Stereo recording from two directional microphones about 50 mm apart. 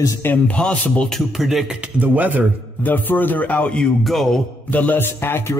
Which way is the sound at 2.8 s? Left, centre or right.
Left.